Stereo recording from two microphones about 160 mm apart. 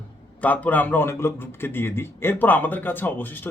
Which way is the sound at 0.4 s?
10° left (ahead or behind).